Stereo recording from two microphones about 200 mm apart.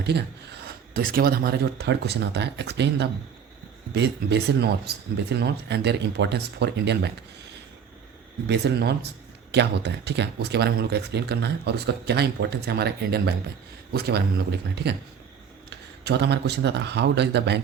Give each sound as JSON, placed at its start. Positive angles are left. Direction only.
{"t": 0.9, "sound": "speech", "side_deg": -45}
{"t": 8.4, "sound": "speech", "side_deg": -55}
{"t": 16.0, "sound": "speech", "side_deg": -55}